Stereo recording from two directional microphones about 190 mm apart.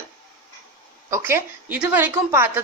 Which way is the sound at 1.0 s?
15° right (ahead or behind).